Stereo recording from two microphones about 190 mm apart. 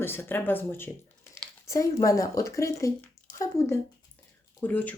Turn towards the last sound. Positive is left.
turn(degrees=10)  # may be behind; listen again after turning